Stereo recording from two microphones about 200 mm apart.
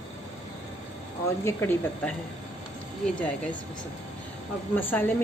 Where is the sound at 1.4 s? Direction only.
10° left (ahead or behind).